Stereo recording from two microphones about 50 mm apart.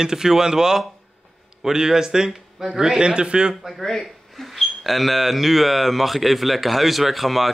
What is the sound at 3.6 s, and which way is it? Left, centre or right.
Speech, centre.